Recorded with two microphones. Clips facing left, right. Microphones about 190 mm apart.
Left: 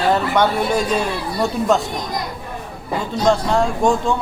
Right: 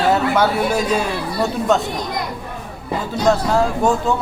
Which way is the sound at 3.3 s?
5° right (ahead or behind).